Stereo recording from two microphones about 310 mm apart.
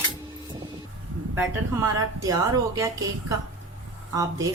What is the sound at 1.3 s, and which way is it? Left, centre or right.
A woman's voice, centre.